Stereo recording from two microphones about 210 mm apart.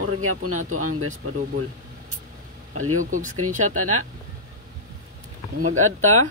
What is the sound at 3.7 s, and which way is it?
Speech, 90° right.